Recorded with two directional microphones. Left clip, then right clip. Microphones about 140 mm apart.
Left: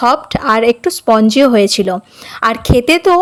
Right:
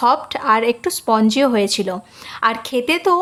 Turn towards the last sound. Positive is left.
turn(degrees=35)  # may be behind; listen again after turning